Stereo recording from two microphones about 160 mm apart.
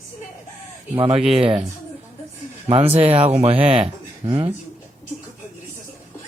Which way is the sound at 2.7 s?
35° right (ahead or behind).